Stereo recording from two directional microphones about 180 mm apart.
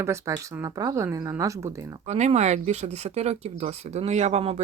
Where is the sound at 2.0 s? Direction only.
40° right (ahead or behind).